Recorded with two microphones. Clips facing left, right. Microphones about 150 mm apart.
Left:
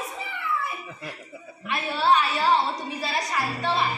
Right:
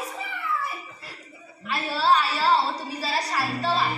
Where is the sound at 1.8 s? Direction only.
35° right (ahead or behind).